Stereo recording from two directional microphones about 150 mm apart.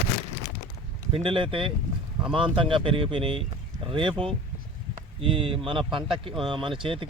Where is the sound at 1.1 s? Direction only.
35° right (ahead or behind).